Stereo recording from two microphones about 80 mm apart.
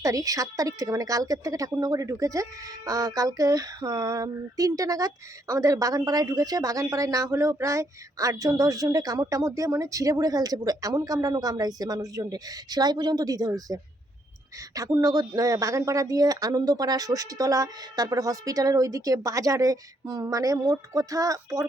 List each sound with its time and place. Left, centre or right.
0.0 s a woman's voice: right
14.8 s a woman's voice: right